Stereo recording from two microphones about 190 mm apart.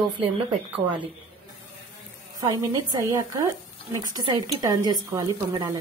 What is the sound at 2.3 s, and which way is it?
Speech, 20° right (ahead or behind).